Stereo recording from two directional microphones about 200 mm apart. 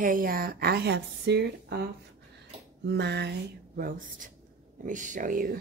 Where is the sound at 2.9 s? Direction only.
55° right (ahead or behind).